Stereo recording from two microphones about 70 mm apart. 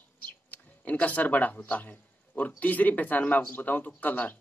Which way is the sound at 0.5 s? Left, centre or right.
Left.